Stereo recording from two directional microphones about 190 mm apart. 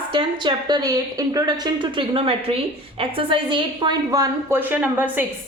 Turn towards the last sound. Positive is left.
turn(degrees=-10)  # may be behind; listen again after turning